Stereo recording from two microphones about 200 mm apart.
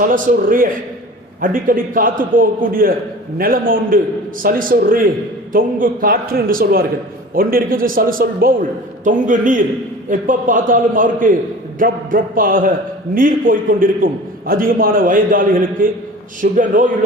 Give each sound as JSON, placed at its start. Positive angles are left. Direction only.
{"t": 0.0, "sound": "a man's voice", "side_deg": -40}